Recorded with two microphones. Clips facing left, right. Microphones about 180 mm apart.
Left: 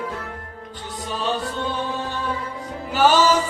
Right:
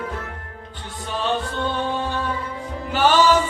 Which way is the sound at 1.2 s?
40° left (ahead or behind).